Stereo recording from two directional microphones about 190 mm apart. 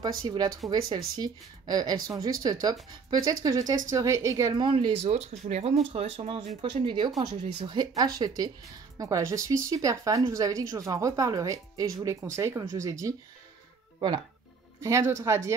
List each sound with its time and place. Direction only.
0.3 s speech: 20° right (ahead or behind)